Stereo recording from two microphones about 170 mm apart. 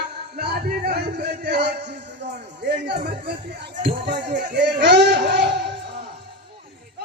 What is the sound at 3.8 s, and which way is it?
Speech, 75° right (ahead or behind).